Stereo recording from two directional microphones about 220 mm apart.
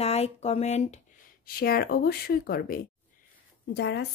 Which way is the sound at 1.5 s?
45° left (ahead or behind).